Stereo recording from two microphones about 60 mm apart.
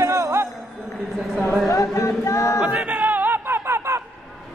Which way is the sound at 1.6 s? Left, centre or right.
Left.